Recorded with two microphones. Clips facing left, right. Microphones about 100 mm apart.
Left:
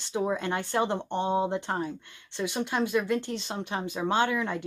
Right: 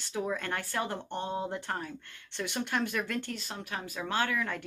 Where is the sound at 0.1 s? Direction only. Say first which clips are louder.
Left 5 dB; 25° left (ahead or behind).